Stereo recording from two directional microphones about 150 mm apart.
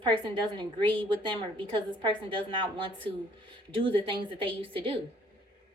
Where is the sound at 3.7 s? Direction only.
35° right (ahead or behind).